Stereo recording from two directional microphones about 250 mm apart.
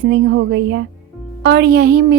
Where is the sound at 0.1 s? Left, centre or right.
Right.